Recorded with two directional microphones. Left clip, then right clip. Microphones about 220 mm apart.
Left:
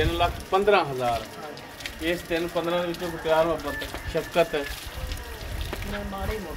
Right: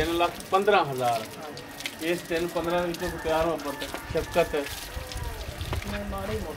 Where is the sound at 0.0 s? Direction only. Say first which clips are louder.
Left 1 dB; 25° left (ahead or behind).